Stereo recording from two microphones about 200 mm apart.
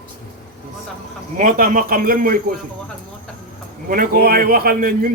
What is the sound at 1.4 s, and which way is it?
A man's voice, 45° right (ahead or behind).